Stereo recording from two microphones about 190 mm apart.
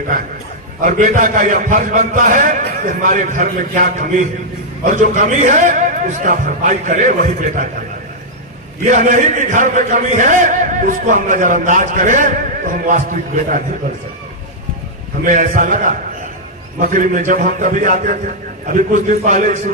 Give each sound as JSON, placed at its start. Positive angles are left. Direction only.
{"t": 0.8, "sound": "speech", "side_deg": -45}
{"t": 8.9, "sound": "speech", "side_deg": -45}
{"t": 15.2, "sound": "speech", "side_deg": -45}